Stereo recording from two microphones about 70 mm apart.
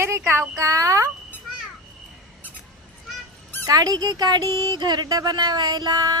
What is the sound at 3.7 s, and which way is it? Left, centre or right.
Speech, right.